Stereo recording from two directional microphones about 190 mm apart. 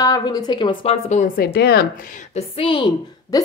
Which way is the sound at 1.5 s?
55° left (ahead or behind).